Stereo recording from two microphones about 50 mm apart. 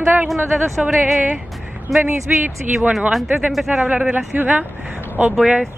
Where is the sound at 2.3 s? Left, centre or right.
Right.